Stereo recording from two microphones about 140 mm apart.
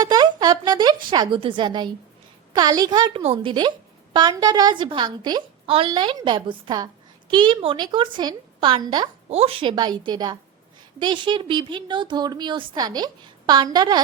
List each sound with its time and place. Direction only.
0.0 s a sound: 30° right (ahead or behind)
1.1 s a woman's voice: 35° right (ahead or behind)
9.3 s a woman's voice: 45° right (ahead or behind)